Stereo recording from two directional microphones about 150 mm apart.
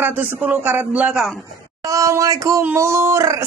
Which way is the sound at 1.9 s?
20° right (ahead or behind).